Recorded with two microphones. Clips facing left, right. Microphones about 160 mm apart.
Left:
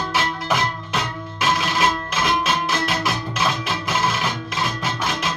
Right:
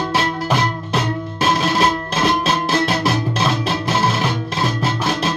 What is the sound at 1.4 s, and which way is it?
Music, 35° right (ahead or behind).